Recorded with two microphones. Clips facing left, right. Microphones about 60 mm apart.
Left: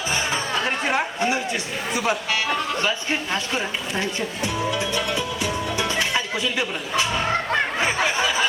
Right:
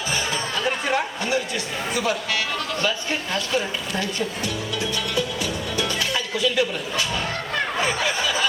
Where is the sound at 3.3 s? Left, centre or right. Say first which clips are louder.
Right 1 dB; left.